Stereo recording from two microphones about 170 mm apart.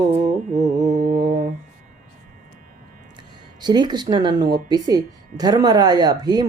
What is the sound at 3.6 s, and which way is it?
A woman's voice, 25° right (ahead or behind).